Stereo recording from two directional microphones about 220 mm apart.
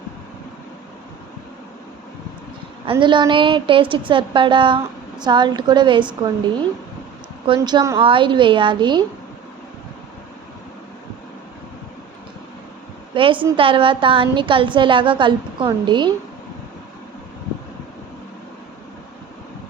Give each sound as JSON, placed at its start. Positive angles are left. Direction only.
{"t": 2.8, "sound": "a woman's voice", "side_deg": -20}
{"t": 7.4, "sound": "a woman's voice", "side_deg": -20}
{"t": 13.1, "sound": "a woman's voice", "side_deg": -25}